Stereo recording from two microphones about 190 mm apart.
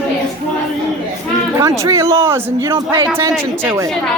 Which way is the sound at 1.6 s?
15° right (ahead or behind).